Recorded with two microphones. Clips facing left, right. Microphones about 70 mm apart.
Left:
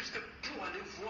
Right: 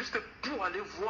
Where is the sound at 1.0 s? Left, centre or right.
Right.